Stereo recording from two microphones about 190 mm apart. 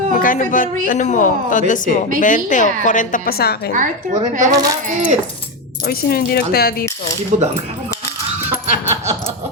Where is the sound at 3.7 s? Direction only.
40° right (ahead or behind).